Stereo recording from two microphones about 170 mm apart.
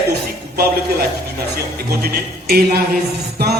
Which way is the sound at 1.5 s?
65° right (ahead or behind).